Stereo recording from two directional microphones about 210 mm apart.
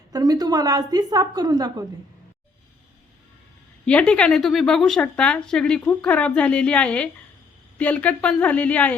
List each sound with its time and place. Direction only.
0.1 s a woman's voice: 20° right (ahead or behind)
3.8 s a woman's voice: 5° left (ahead or behind)